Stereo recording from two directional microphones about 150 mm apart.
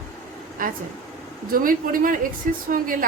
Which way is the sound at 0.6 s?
65° right (ahead or behind).